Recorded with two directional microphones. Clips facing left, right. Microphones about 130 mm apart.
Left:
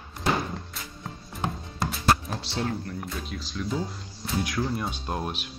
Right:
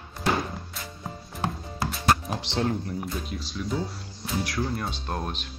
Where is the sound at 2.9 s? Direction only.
Centre (ahead or behind).